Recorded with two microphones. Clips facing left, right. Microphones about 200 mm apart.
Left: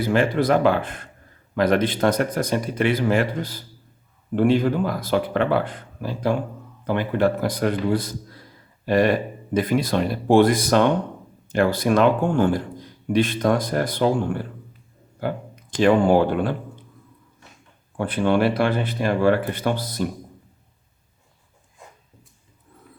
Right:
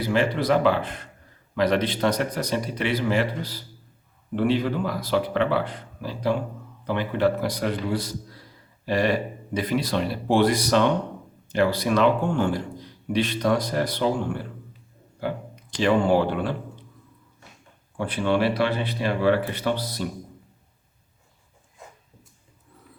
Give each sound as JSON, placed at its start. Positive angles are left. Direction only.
{"t": 0.0, "sound": "speech", "side_deg": 50}
{"t": 15.7, "sound": "speech", "side_deg": 50}
{"t": 17.9, "sound": "speech", "side_deg": 50}